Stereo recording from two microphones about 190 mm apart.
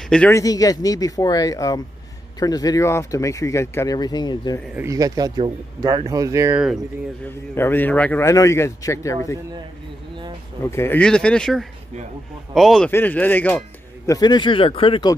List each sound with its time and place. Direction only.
0.1 s a man's voice: 5° left (ahead or behind)
0.4 s a man's voice: 20° left (ahead or behind)
4.7 s speech: 15° right (ahead or behind)
7.2 s a man's voice: 10° left (ahead or behind)
10.6 s a man's voice: 15° left (ahead or behind)
14.1 s speech: 20° left (ahead or behind)